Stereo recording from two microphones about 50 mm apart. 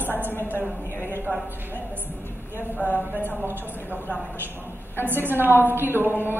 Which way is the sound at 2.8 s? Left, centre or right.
Right.